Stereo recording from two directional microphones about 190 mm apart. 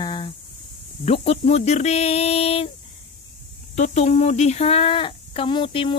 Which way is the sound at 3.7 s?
35° left (ahead or behind).